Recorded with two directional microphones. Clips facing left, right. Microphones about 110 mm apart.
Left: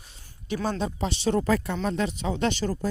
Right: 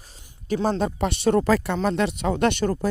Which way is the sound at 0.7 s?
50° right (ahead or behind).